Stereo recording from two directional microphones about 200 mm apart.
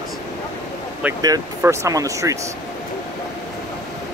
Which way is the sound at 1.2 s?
15° right (ahead or behind).